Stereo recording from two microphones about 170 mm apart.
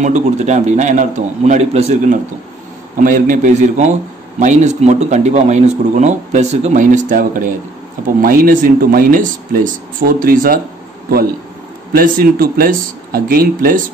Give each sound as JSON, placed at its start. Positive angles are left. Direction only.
{"t": 0.0, "sound": "a man's voice", "side_deg": -45}
{"t": 3.0, "sound": "a man's voice", "side_deg": -50}
{"t": 11.9, "sound": "speech", "side_deg": -60}